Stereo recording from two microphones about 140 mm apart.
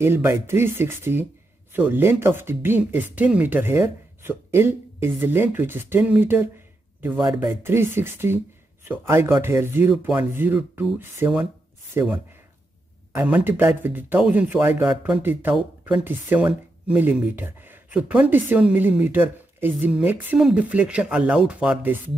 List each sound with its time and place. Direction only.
0.0 s speech: 15° right (ahead or behind)
13.2 s speech: 10° right (ahead or behind)